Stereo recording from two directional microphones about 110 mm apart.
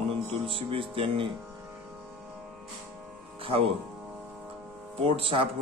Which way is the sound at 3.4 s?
60° right (ahead or behind).